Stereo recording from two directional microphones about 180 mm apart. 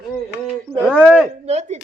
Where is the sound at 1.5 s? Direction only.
40° right (ahead or behind).